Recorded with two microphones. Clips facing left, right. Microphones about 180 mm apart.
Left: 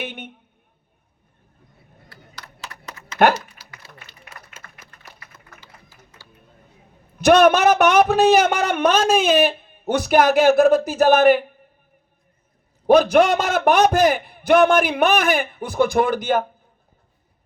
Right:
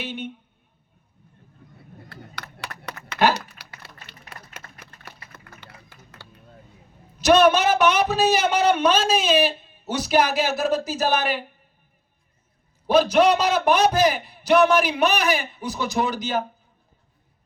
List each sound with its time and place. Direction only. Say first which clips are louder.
0.0 s speech: even; 55° left (ahead or behind)
2.0 s a sound: right 3 dB; 65° right (ahead or behind)
2.8 s typing: right 2 dB; 65° right (ahead or behind)
3.6 s a sound: even; 65° right (ahead or behind)
7.2 s a man's voice: left 3 dB; 55° left (ahead or behind)
12.9 s a man's voice: left 3 dB; 50° left (ahead or behind)